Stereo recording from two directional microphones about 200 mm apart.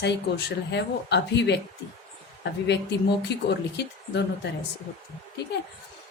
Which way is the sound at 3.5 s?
55° left (ahead or behind).